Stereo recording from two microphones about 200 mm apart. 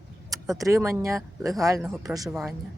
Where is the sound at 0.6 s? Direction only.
15° right (ahead or behind).